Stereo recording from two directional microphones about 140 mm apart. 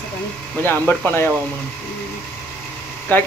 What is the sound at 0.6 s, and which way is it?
Speech, 15° left (ahead or behind).